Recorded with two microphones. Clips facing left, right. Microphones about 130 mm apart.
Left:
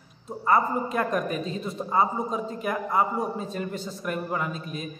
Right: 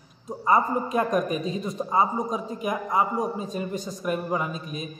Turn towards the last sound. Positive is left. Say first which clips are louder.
# even
turn(degrees=-15)  # may be behind; listen again after turning